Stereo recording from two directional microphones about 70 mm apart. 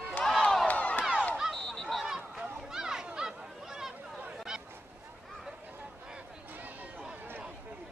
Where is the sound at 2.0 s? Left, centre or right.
Centre.